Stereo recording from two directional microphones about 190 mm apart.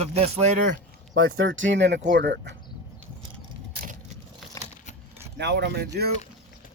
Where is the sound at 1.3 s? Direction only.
90° right; by 2.5 s 65° right (ahead or behind).